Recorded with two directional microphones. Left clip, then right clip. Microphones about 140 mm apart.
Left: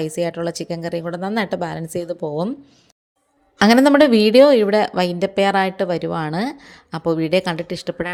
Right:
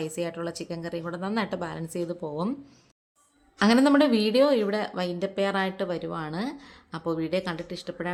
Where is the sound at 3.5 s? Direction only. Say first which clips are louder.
Left 9 dB; 50° left (ahead or behind).